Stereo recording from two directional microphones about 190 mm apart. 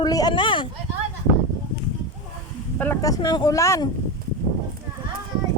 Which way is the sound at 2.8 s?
15° left (ahead or behind).